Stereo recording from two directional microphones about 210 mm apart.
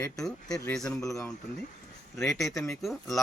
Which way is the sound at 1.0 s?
15° left (ahead or behind).